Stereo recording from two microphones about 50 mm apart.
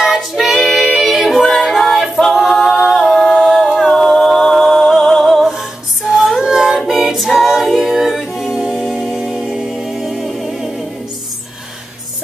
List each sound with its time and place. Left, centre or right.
0.0 s child singing: centre
0.7 s a capella: centre
3.4 s a capella: centre
4.0 s music: centre
6.1 s female singing: centre
6.5 s music: centre
6.9 s a capella: centre